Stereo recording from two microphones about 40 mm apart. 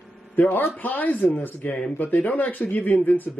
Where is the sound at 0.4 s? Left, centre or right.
Left.